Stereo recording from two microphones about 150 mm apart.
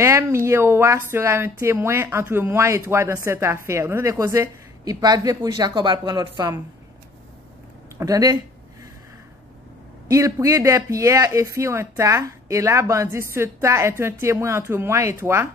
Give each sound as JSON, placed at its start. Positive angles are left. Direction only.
{"t": 0.0, "sound": "speech", "side_deg": -20}
{"t": 8.0, "sound": "speech", "side_deg": -25}
{"t": 10.0, "sound": "speech", "side_deg": -20}